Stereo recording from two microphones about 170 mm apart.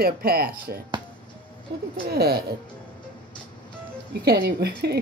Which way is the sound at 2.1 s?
70° right (ahead or behind).